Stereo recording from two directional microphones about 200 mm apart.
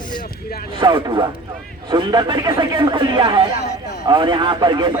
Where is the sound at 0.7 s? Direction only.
25° right (ahead or behind).